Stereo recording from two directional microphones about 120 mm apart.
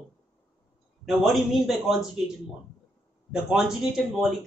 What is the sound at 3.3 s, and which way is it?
Speech, 5° right (ahead or behind).